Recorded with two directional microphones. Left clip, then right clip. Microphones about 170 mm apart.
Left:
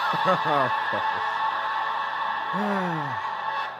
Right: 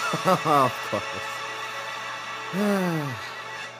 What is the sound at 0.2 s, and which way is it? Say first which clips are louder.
Speech: right 4 dB; 10° right (ahead or behind).